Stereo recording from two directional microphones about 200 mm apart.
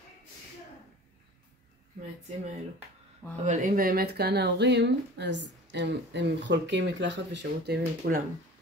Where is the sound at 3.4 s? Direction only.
35° right (ahead or behind).